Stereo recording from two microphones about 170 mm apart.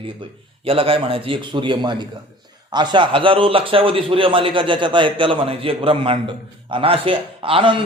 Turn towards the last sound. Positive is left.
turn(degrees=-30)  # may be behind; listen again after turning